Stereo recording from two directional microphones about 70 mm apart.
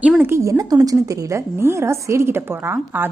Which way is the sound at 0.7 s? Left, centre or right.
Right.